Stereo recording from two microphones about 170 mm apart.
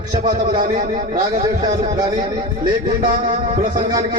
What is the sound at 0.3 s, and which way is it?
A man's voice, 50° right (ahead or behind).